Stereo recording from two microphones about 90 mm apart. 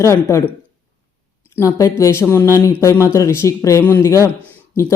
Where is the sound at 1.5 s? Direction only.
35° left (ahead or behind).